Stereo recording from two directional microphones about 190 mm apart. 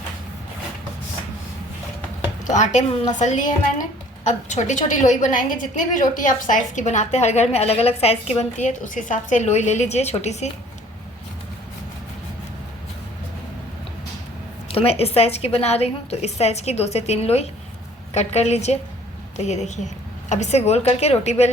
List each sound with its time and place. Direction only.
2.5 s a woman's voice: 40° left (ahead or behind)
14.7 s a woman's voice: 30° left (ahead or behind)